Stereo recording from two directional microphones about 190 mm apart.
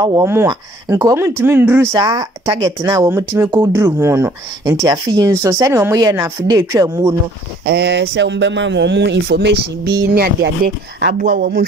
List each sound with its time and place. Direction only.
0.0 s speech: 15° right (ahead or behind)
7.6 s speech: 60° right (ahead or behind)